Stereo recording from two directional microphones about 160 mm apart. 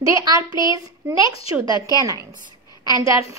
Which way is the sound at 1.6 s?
30° left (ahead or behind).